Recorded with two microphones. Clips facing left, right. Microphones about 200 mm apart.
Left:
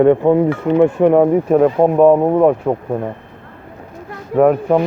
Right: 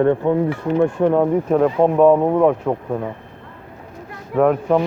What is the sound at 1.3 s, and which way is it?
Speech, 10° left (ahead or behind).